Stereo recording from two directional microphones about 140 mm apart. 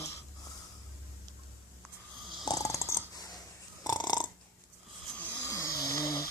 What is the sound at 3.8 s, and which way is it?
Purr, 30° left (ahead or behind).